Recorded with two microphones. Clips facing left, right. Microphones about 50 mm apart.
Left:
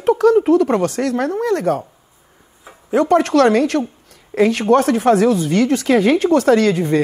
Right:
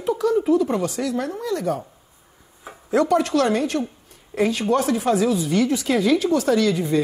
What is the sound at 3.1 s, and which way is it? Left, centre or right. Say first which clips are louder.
Speech: left 10 dB; left.